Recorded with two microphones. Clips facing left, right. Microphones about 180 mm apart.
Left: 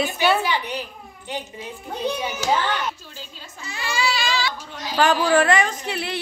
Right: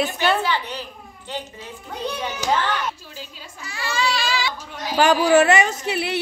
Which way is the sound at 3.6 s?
20° left (ahead or behind).